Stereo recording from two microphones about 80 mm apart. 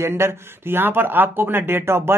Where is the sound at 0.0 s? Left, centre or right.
Right.